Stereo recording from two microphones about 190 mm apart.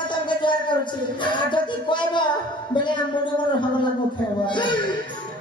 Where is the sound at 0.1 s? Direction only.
25° left (ahead or behind).